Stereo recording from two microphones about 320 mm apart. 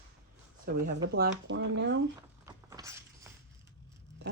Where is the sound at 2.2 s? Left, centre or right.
Centre.